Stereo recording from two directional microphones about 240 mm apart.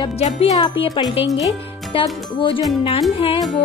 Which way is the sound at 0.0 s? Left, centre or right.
Left.